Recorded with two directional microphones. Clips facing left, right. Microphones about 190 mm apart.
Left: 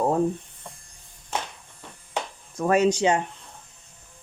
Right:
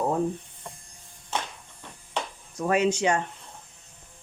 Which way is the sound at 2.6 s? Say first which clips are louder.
Left 3 dB; 45° left (ahead or behind).